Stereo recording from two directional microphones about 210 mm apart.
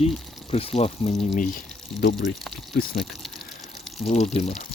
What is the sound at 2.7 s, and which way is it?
Speech, 50° left (ahead or behind).